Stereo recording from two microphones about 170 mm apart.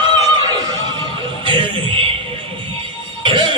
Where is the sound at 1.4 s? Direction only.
30° right (ahead or behind).